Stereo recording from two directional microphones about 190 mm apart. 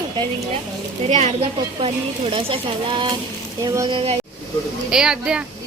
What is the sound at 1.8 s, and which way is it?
Speech, 30° right (ahead or behind).